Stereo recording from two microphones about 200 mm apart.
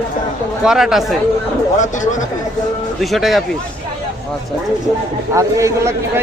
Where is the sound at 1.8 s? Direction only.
40° left (ahead or behind).